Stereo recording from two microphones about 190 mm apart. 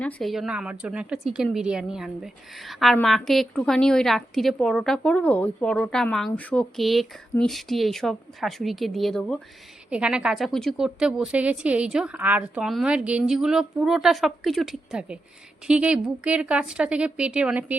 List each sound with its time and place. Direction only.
0.0 s a woman's voice: 5° left (ahead or behind)